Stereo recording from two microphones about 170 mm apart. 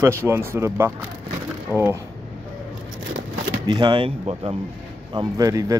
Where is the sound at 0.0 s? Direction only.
15° right (ahead or behind).